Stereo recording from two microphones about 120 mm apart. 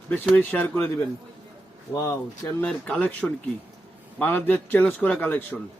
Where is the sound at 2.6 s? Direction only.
10° left (ahead or behind).